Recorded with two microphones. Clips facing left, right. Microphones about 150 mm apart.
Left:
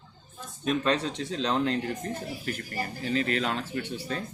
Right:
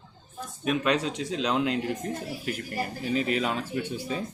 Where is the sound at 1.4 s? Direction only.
10° right (ahead or behind).